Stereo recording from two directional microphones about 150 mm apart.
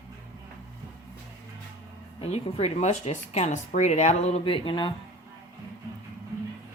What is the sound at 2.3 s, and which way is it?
Speech, 45° left (ahead or behind).